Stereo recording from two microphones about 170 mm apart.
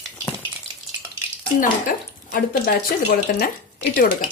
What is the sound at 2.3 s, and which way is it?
Speech, 60° left (ahead or behind).